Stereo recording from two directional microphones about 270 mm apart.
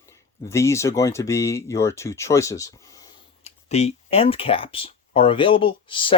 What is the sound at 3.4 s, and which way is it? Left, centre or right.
Speech, left.